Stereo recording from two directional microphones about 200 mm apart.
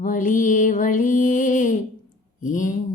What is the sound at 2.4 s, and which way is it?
Speech, 40° left (ahead or behind).